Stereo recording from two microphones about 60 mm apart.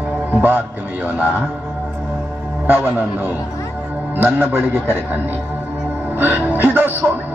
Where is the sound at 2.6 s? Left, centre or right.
Right.